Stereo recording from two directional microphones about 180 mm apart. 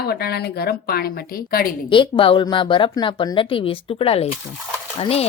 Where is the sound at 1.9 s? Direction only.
30° left (ahead or behind).